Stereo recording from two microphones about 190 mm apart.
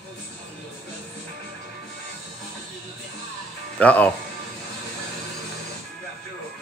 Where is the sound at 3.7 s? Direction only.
5° left (ahead or behind).